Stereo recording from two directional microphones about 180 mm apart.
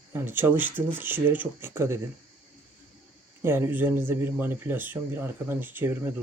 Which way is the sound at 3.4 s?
10° right (ahead or behind).